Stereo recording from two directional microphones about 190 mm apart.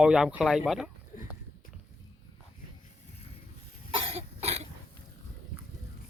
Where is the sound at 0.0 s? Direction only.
5° right (ahead or behind).